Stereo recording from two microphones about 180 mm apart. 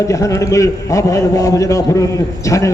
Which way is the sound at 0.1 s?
15° left (ahead or behind).